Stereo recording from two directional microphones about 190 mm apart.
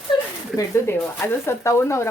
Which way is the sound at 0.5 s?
15° left (ahead or behind).